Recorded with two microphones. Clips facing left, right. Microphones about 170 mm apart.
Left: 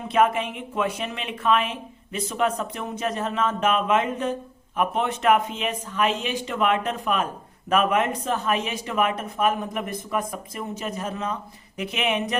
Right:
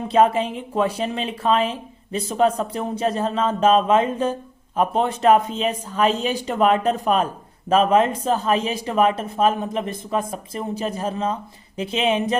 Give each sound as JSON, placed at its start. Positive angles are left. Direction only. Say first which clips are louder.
{"t": 0.1, "sound": "speech", "louder": "right 4 dB", "side_deg": -30}